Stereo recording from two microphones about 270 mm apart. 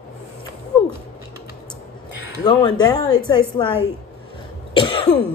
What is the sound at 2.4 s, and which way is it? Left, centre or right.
A woman's voice, centre.